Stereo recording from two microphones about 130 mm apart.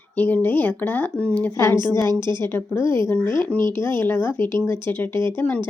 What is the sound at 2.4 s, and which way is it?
Speech, 15° left (ahead or behind).